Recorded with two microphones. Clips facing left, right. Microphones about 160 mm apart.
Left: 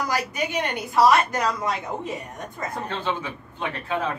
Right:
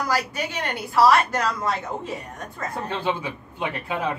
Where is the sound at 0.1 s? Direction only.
15° left (ahead or behind).